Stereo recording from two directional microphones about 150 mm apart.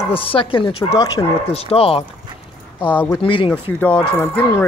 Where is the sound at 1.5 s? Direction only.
40° left (ahead or behind).